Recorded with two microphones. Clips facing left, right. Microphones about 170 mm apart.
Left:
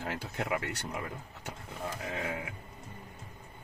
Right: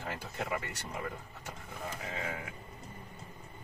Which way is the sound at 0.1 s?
65° left (ahead or behind).